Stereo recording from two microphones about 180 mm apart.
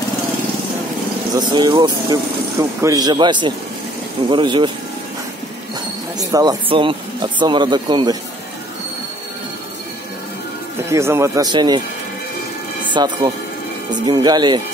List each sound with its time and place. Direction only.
1.3 s speech: 25° right (ahead or behind)
6.1 s speech: 20° right (ahead or behind)
10.9 s speech: 15° right (ahead or behind)
12.8 s speech: 25° right (ahead or behind)